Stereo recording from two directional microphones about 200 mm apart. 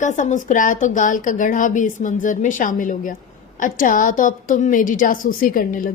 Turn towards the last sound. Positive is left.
turn(degrees=45)  # may be behind; listen again after turning